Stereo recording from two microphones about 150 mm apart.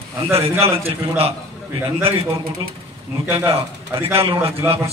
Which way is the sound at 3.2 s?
35° right (ahead or behind).